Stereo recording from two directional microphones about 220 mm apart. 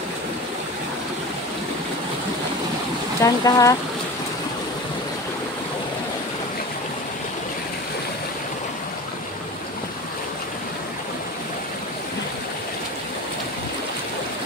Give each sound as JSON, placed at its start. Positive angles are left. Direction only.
{"t": 3.2, "sound": "speech", "side_deg": 15}